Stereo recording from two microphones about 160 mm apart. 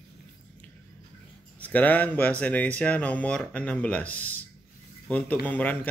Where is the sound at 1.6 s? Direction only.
10° left (ahead or behind).